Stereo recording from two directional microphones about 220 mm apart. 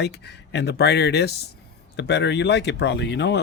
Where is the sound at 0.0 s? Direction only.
50° left (ahead or behind).